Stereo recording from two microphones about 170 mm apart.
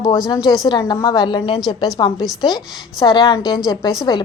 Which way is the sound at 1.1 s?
25° left (ahead or behind).